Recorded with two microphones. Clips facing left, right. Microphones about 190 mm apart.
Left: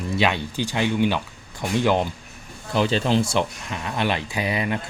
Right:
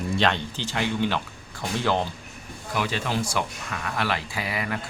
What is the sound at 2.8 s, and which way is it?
A man's voice, 30° left (ahead or behind).